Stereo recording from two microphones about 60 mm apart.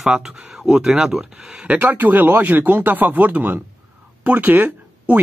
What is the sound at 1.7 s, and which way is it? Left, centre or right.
Speech, right.